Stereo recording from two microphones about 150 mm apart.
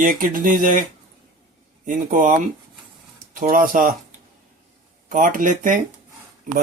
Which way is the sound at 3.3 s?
65° right (ahead or behind).